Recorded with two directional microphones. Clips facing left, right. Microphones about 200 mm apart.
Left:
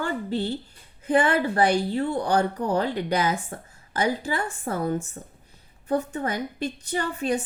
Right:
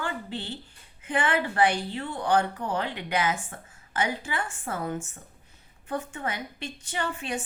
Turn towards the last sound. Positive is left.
turn(degrees=40)  # may be behind; listen again after turning